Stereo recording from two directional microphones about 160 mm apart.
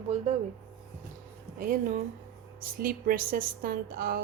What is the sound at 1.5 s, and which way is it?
A woman's voice, 55° right (ahead or behind).